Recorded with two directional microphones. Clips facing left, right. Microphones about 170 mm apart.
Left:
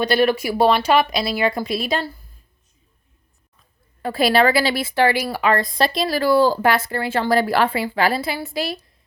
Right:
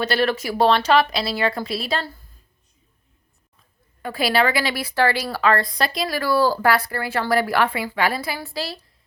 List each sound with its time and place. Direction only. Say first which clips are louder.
0.0 s speech: left 4 dB; 15° left (ahead or behind)
4.0 s a woman's voice: left 4 dB; 40° left (ahead or behind); by 8.8 s 15° left (ahead or behind)